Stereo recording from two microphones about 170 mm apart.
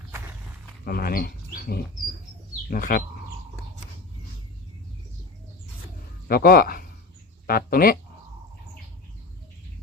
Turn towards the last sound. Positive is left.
turn(degrees=60)  # may be behind; listen again after turning